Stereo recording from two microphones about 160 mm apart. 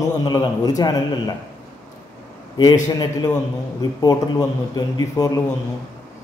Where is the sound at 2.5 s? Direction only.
25° left (ahead or behind).